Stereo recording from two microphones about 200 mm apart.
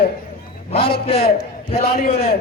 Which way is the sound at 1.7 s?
30° left (ahead or behind).